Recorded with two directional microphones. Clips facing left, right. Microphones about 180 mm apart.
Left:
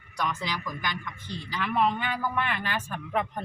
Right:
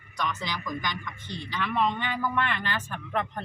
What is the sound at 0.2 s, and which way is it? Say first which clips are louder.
A man's voice: left 1 dB; 10° left (ahead or behind).